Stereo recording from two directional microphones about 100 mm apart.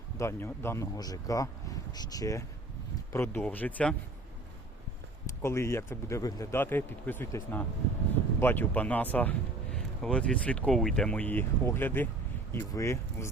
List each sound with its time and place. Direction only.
0.2 s speech: 25° left (ahead or behind)
0.9 s speech: 40° left (ahead or behind)
3.1 s speech: 20° left (ahead or behind)
5.2 s speech: 25° left (ahead or behind)
6.6 s speech: 20° left (ahead or behind)